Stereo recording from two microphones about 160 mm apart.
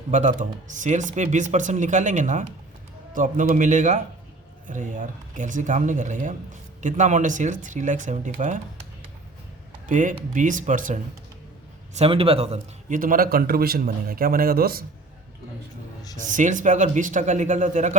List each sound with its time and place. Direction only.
0.1 s speech: 50° right (ahead or behind)
9.8 s speech: 55° right (ahead or behind)
11.9 s a man's voice: 35° right (ahead or behind)
12.9 s a man's voice: 60° right (ahead or behind)
16.1 s speech: 50° right (ahead or behind)